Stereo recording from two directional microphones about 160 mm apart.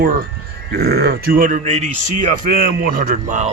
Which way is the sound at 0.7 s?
80° right.